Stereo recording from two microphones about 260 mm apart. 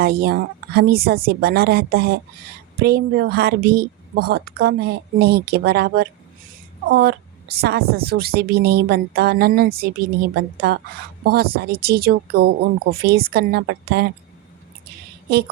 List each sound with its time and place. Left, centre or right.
0.0 s a woman's voice: right